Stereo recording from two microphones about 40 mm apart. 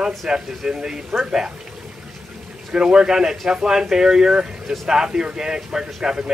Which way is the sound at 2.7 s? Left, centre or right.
Right.